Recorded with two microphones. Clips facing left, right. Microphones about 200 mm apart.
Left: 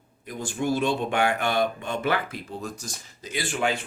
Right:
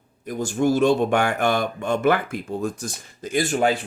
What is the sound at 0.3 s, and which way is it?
Speech, 45° right (ahead or behind).